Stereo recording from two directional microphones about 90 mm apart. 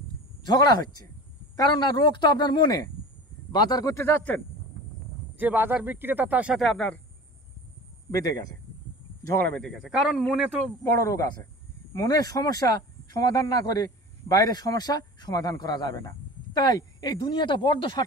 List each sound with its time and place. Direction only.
0.5 s speech: 50° left (ahead or behind)
1.6 s speech: 60° left (ahead or behind)
3.9 s speech: 25° left (ahead or behind)
5.4 s speech: 20° right (ahead or behind)
6.5 s a man's voice: centre (ahead or behind)
8.1 s speech: 40° left (ahead or behind)
9.8 s a man's voice: 5° right (ahead or behind)
10.8 s speech: 35° left (ahead or behind); by 18.0 s 60° left (ahead or behind)